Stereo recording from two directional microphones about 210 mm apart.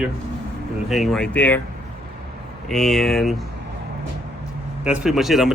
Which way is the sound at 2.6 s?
Centre (ahead or behind).